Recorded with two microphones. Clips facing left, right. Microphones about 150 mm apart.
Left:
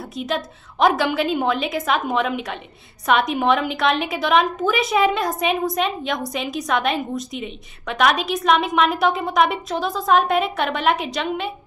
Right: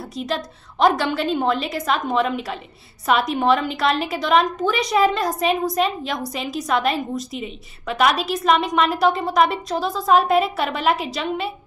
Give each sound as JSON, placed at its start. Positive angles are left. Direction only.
{"t": 0.1, "sound": "a woman's voice", "side_deg": 0}